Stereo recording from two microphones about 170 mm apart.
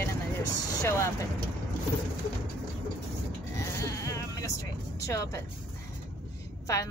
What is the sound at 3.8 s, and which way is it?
Sheep, 20° left (ahead or behind).